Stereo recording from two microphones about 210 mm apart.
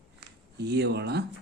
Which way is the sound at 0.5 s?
50° right (ahead or behind).